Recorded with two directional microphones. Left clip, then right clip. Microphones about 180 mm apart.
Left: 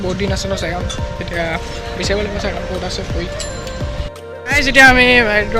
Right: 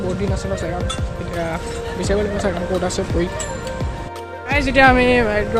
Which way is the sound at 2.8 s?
50° right (ahead or behind).